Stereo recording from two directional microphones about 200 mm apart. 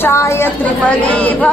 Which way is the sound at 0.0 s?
15° left (ahead or behind).